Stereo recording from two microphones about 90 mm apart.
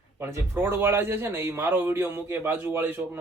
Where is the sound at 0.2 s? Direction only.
25° right (ahead or behind).